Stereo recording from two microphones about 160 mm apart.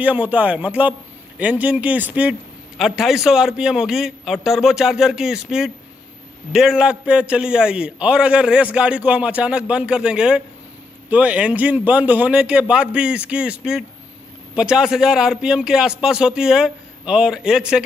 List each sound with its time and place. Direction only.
0.0 s a man's voice: 10° right (ahead or behind)